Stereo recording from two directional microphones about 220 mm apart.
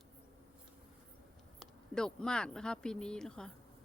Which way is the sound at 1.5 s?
5° left (ahead or behind).